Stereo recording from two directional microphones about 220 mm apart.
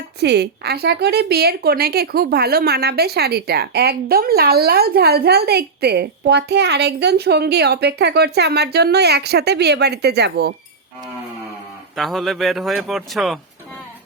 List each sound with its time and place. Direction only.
0.2 s a woman's voice: 50° right (ahead or behind)
11.9 s a man's voice: centre (ahead or behind)